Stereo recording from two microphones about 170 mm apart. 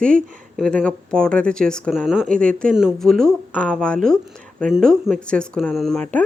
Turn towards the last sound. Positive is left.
turn(degrees=5)  # may be behind; listen again after turning